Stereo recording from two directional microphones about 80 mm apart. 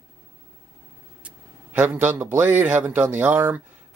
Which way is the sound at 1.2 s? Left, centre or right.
Centre.